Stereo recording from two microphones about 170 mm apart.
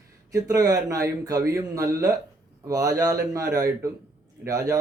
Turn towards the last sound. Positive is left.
turn(degrees=-20)  # may be behind; listen again after turning